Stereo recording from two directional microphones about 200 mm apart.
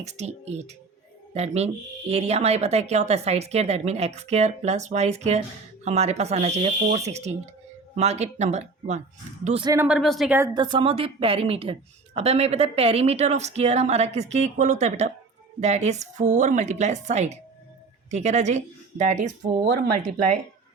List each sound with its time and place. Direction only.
0.0 s a woman's voice: 35° right (ahead or behind)
9.6 s speech: 10° right (ahead or behind)
10.3 s a woman's voice: 20° right (ahead or behind); by 19.3 s 35° right (ahead or behind)